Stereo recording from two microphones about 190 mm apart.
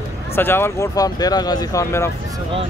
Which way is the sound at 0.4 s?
10° left (ahead or behind).